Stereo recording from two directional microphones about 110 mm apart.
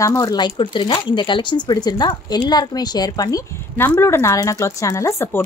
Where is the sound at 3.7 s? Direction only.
20° left (ahead or behind).